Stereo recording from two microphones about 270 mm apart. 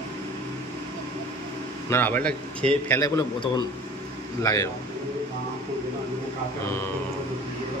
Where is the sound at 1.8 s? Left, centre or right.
Centre.